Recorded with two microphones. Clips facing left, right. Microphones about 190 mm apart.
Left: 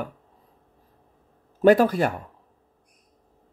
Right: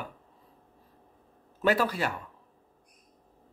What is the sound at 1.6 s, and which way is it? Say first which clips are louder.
Speech: left 9 dB; 45° left (ahead or behind).